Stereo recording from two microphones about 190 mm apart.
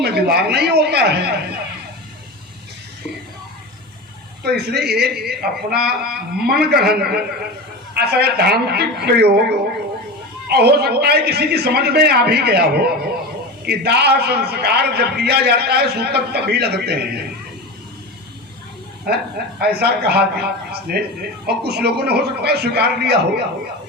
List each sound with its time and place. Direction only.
0.0 s a man's voice: 55° right (ahead or behind)
4.4 s a man's voice: 60° right (ahead or behind)
19.0 s a man's voice: 55° right (ahead or behind)